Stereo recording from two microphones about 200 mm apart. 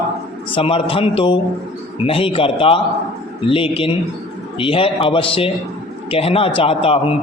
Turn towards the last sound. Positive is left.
turn(degrees=30)  # may be behind; listen again after turning